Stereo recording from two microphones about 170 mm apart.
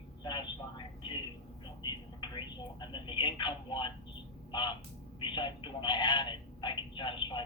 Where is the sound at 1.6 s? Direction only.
25° left (ahead or behind).